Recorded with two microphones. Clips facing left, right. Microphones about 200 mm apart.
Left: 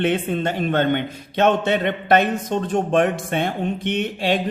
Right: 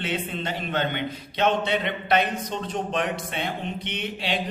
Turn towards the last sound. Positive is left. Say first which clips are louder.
# left 9 dB
turn(degrees=50)  # may be behind; listen again after turning